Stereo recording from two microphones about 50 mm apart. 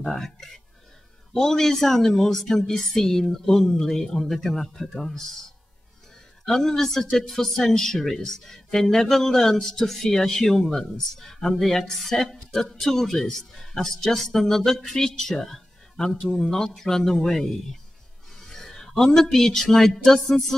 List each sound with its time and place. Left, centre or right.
0.0 s speech: centre
6.4 s speech: centre